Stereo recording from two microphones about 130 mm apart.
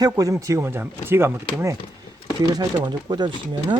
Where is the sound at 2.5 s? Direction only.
30° right (ahead or behind).